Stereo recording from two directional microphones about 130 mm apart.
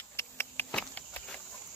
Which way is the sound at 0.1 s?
20° left (ahead or behind).